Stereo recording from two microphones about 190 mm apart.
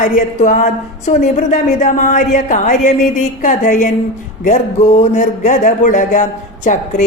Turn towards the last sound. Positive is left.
turn(degrees=40)  # may be behind; listen again after turning